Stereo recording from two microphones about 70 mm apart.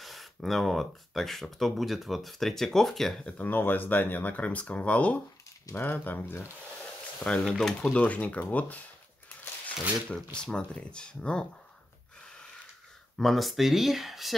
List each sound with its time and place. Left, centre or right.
0.0 s speech: centre
3.3 s speech: left
7.2 s speech: centre
7.9 s speech: centre
10.3 s speech: centre
13.2 s speech: centre